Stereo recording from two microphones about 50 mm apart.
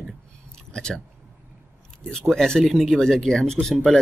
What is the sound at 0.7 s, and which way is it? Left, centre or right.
Speech, centre.